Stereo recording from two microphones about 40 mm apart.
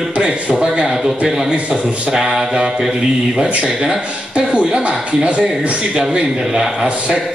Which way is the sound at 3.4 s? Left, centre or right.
Right.